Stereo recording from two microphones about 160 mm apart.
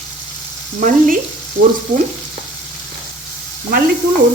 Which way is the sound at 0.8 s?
60° right (ahead or behind).